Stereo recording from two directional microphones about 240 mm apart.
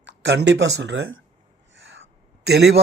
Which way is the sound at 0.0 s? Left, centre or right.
Right.